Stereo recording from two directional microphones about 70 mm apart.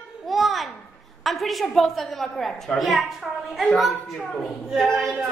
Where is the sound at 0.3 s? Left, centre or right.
Centre.